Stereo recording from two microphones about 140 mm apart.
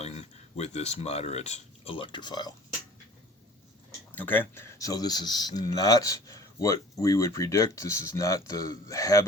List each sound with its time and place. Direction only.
0.0 s speech: 50° left (ahead or behind); by 2.6 s 30° left (ahead or behind)
4.1 s speech: 15° left (ahead or behind)